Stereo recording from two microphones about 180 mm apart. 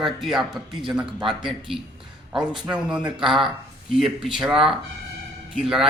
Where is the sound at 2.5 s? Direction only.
5° right (ahead or behind).